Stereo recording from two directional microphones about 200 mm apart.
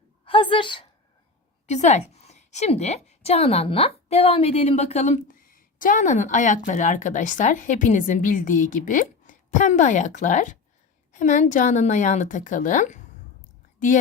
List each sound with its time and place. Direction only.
0.3 s a woman's voice: 25° left (ahead or behind)
1.6 s a woman's voice: 35° left (ahead or behind)